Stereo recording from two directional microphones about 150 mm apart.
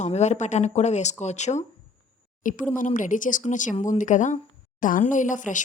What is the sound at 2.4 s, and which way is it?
Speech, 60° left (ahead or behind).